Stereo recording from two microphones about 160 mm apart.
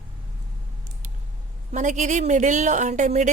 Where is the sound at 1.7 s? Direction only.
50° right (ahead or behind).